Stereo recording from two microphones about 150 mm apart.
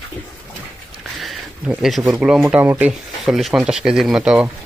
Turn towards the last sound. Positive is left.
turn(degrees=-5)  # may be behind; listen again after turning